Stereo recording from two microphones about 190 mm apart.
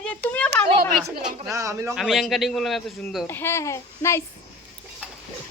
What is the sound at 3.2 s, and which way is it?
A woman's voice, 10° left (ahead or behind).